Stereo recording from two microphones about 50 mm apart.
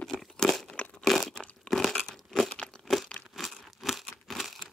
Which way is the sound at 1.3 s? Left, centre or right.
Centre.